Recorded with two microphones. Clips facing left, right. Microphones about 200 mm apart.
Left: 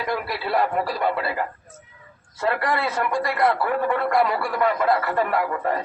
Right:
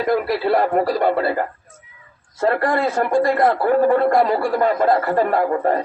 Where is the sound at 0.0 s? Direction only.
35° right (ahead or behind).